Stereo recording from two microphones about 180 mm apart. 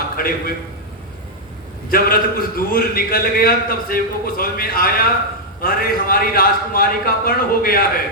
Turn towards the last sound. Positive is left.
turn(degrees=55)  # may be behind; listen again after turning